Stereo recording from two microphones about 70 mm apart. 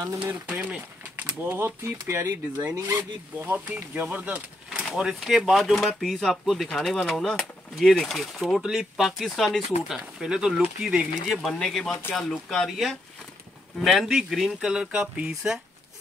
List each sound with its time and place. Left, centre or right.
0.2 s speech: right
5.2 s speech: centre
9.9 s speech: centre
11.4 s speech: centre